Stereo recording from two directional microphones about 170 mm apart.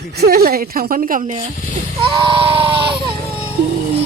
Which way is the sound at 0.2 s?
65° right (ahead or behind).